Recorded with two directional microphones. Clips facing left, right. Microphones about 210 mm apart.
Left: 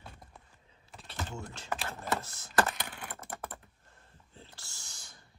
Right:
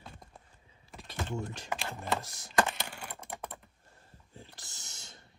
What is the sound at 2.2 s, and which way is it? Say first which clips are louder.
Computer keyboard: right 1 dB; 15° right (ahead or behind).